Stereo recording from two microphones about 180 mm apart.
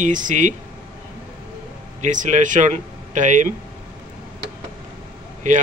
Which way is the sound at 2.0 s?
45° right (ahead or behind).